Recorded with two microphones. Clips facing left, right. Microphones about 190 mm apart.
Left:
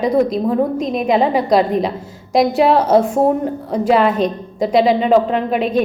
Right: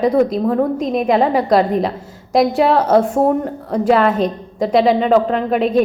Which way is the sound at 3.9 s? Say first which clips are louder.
Left 1 dB; centre (ahead or behind).